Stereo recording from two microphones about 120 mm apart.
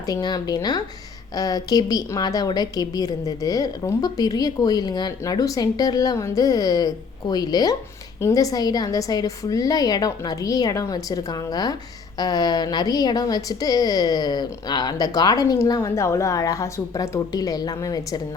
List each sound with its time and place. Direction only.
0.0 s a woman's voice: 35° left (ahead or behind)